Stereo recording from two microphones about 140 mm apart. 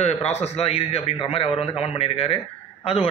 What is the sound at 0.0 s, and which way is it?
A man's voice, 50° left (ahead or behind).